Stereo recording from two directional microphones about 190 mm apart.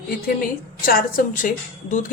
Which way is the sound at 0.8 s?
45° left (ahead or behind).